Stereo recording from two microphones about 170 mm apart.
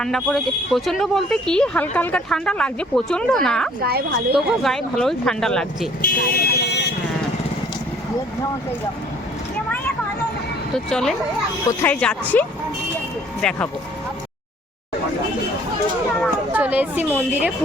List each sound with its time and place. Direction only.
0.0 s speech: centre (ahead or behind)
6.0 s speech: 60° left (ahead or behind)
10.8 s speech: 5° left (ahead or behind)
16.2 s a sound: 10° right (ahead or behind)